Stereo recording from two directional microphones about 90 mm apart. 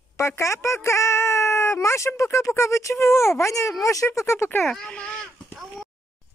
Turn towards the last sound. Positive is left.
turn(degrees=10)  # may be behind; listen again after turning